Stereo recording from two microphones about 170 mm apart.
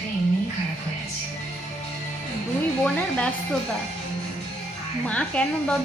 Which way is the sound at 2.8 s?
5° left (ahead or behind).